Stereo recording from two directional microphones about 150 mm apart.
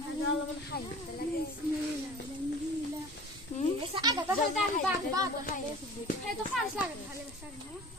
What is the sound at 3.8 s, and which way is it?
Goat, 25° right (ahead or behind).